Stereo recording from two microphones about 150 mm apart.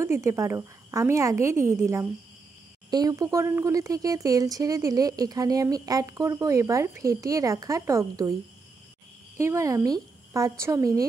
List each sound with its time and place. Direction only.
0.0 s speech: 20° right (ahead or behind)
9.4 s speech: 20° right (ahead or behind)